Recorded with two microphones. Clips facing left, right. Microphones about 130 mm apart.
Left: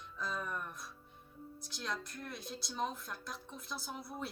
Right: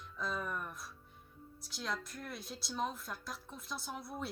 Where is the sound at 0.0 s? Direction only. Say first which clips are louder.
Right 1 dB; centre (ahead or behind).